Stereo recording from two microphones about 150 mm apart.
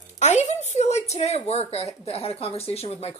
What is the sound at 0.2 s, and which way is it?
A woman's voice, 50° left (ahead or behind).